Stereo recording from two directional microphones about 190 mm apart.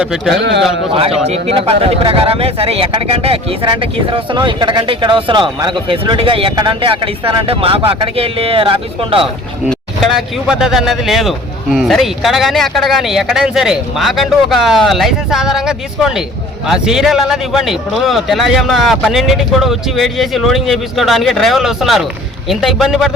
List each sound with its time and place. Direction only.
0.0 s speech: 5° right (ahead or behind)
0.3 s a man's voice: 65° right (ahead or behind)
1.3 s speech: 30° right (ahead or behind)
9.2 s speech: centre (ahead or behind)